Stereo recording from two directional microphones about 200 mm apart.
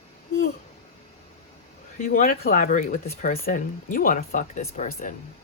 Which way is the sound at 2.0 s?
40° left (ahead or behind).